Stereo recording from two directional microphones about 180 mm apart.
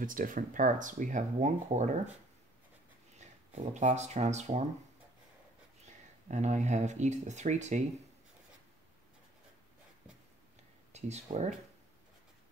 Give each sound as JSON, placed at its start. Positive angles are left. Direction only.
{"t": 0.0, "sound": "speech", "side_deg": -50}
{"t": 3.2, "sound": "speech", "side_deg": -40}
{"t": 6.3, "sound": "speech", "side_deg": -40}
{"t": 10.9, "sound": "speech", "side_deg": -40}